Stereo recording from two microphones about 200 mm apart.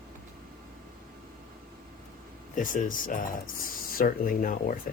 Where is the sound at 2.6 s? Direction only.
40° left (ahead or behind).